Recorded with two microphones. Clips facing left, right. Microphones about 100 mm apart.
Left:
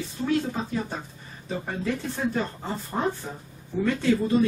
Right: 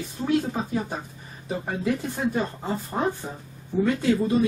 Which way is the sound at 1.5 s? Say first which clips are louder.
Right 3 dB; 10° right (ahead or behind).